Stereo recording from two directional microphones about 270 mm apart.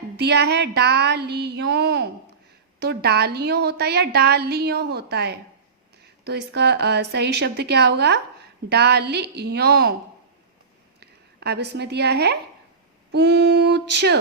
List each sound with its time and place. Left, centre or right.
0.2 s a woman's voice: right
11.0 s a woman's voice: right